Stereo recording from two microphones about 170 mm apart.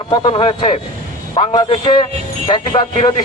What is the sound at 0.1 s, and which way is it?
A man's voice, 30° left (ahead or behind).